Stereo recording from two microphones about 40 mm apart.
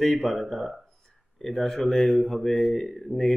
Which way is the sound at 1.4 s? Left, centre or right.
Centre.